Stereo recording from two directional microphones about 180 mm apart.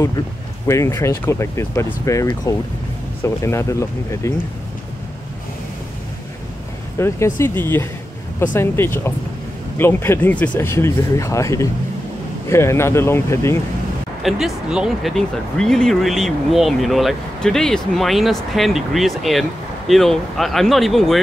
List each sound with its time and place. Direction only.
0.7 s speech: 15° left (ahead or behind)
7.0 s speech: 15° left (ahead or behind)
14.2 s speech: 5° right (ahead or behind)